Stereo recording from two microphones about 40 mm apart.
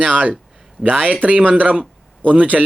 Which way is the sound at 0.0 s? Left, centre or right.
Right.